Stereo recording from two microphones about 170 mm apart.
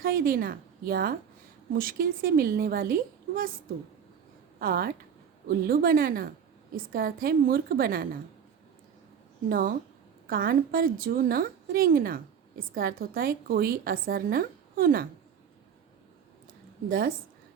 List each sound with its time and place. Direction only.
0.0 s a woman's voice: 60° right (ahead or behind)
4.6 s a woman's voice: 60° right (ahead or behind)
9.5 s a woman's voice: 60° right (ahead or behind)
16.9 s a woman's voice: 60° right (ahead or behind)